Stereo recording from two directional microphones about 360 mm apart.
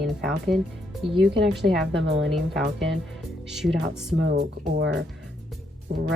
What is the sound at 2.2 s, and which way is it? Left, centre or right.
Speech, centre.